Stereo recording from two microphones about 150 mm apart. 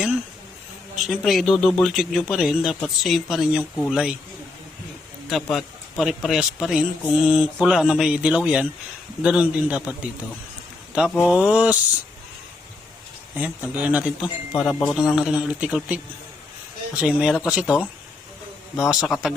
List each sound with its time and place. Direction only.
1.0 s speech: centre (ahead or behind)
5.3 s speech: centre (ahead or behind)
11.2 s speech: 5° right (ahead or behind)
13.3 s speech: 10° right (ahead or behind)